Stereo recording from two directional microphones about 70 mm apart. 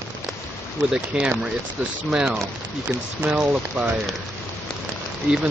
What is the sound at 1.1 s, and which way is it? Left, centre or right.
Speech, centre.